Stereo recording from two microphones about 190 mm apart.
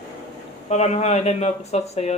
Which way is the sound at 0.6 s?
35° left (ahead or behind).